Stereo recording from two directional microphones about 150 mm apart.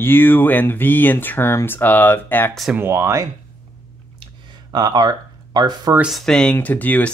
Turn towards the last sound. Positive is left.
turn(degrees=10)  # may be behind; listen again after turning